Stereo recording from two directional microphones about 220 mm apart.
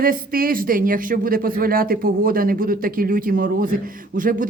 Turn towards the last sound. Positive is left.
turn(degrees=-40)  # may be behind; listen again after turning